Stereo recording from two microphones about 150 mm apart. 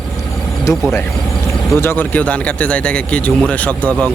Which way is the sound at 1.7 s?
15° left (ahead or behind).